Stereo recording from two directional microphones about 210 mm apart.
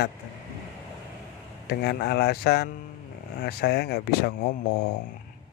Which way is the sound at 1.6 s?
50° left (ahead or behind).